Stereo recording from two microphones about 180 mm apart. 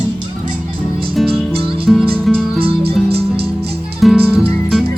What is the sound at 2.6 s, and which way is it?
Music, 30° right (ahead or behind).